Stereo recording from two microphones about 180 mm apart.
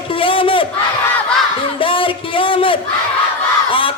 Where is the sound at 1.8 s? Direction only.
30° left (ahead or behind).